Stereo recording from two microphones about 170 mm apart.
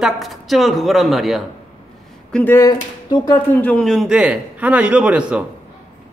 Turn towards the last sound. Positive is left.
turn(degrees=-5)  # may be behind; listen again after turning